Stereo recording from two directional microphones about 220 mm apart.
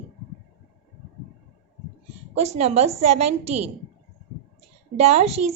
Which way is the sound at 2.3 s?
30° right (ahead or behind).